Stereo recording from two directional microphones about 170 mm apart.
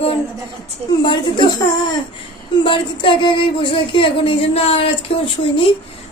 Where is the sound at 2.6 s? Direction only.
30° left (ahead or behind).